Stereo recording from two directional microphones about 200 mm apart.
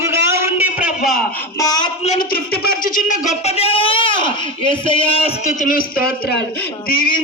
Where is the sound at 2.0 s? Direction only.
45° left (ahead or behind).